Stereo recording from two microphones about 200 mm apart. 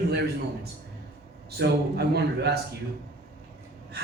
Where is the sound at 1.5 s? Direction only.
55° right (ahead or behind).